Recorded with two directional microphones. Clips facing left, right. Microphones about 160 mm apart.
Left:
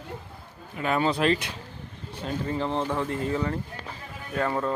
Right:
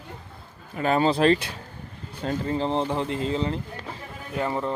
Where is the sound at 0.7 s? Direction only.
35° right (ahead or behind).